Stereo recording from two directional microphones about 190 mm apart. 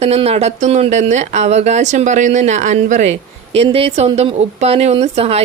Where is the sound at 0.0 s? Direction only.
35° right (ahead or behind).